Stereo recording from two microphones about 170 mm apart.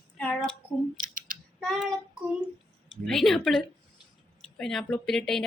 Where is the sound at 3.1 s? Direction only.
Centre (ahead or behind).